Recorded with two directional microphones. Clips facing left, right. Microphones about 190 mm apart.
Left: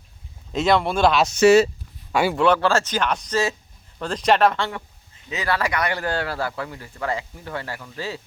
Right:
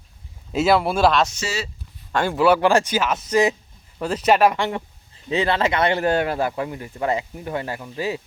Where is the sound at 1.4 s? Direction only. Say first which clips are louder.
Left 15 dB; 60° left (ahead or behind).